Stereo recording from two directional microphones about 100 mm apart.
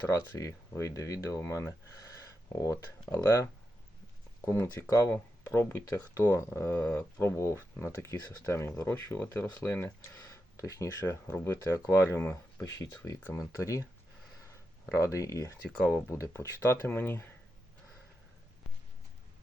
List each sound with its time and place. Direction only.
0.1 s speech: 35° left (ahead or behind)
2.1 s a sound: 30° left (ahead or behind)
3.2 s speech: 25° left (ahead or behind)
14.9 s speech: 30° left (ahead or behind)